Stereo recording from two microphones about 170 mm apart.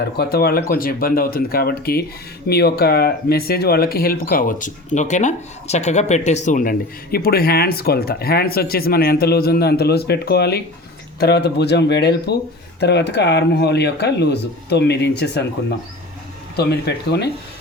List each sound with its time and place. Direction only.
0.2 s speech: 65° left (ahead or behind)
16.6 s speech: 75° left (ahead or behind)